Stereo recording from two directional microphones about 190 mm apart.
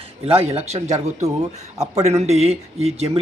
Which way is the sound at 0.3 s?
35° right (ahead or behind).